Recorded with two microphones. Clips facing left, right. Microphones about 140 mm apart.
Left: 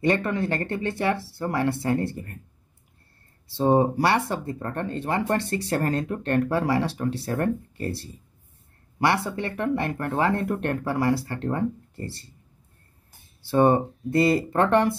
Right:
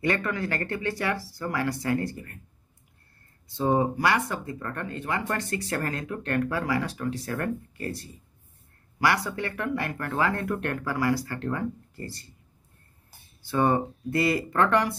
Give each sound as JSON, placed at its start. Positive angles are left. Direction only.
{"t": 0.0, "sound": "speech", "side_deg": 25}
{"t": 3.8, "sound": "speech", "side_deg": 30}
{"t": 9.0, "sound": "speech", "side_deg": 25}
{"t": 13.7, "sound": "speech", "side_deg": 25}